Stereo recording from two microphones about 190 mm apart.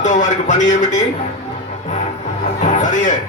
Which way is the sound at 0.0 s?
40° left (ahead or behind).